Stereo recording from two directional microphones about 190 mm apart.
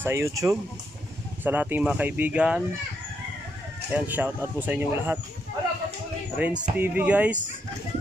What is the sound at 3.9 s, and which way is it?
Speech, 10° right (ahead or behind).